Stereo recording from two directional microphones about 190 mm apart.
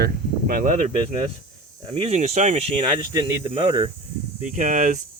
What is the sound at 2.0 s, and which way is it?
Speech, 35° right (ahead or behind).